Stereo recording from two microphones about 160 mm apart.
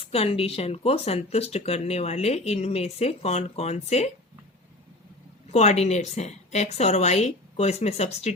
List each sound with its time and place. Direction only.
0.0 s speech: 40° left (ahead or behind)
5.5 s a woman's voice: 45° left (ahead or behind)